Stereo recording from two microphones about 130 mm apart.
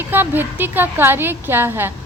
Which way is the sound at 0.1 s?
15° right (ahead or behind).